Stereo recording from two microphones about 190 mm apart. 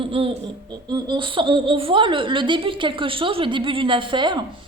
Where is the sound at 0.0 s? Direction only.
30° right (ahead or behind).